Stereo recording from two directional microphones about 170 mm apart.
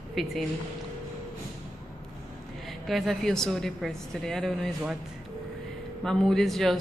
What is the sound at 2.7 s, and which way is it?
A woman's voice, centre (ahead or behind).